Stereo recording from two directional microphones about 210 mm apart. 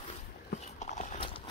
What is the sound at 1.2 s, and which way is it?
Horse, 25° left (ahead or behind).